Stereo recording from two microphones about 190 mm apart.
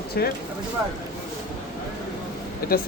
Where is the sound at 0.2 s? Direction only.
55° left (ahead or behind).